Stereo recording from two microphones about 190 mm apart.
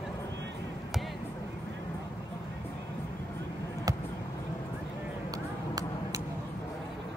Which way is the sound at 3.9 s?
20° right (ahead or behind).